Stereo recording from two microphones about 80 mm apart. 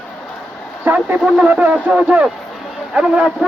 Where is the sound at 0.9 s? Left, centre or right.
Right.